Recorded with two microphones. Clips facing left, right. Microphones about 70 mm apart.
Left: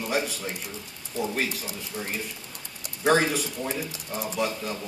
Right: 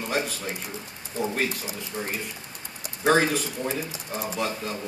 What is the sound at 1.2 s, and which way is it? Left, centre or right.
Speech, right.